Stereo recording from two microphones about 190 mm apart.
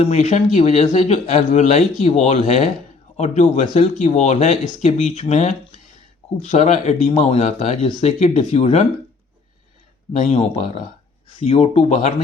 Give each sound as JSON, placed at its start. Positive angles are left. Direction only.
{"t": 0.0, "sound": "speech", "side_deg": 35}
{"t": 10.1, "sound": "speech", "side_deg": 35}